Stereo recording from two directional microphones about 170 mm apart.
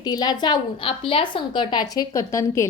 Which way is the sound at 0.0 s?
25° left (ahead or behind).